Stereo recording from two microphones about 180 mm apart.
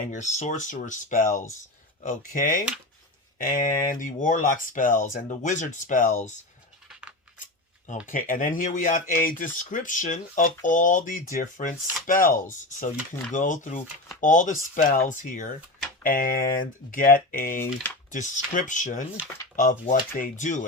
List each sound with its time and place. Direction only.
0.1 s speech: 40° left (ahead or behind)
8.0 s speech: 50° left (ahead or behind)